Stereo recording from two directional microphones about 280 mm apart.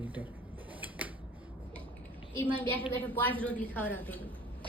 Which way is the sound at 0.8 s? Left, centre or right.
Centre.